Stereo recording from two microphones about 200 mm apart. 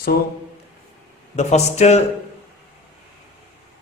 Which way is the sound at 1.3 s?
35° left (ahead or behind).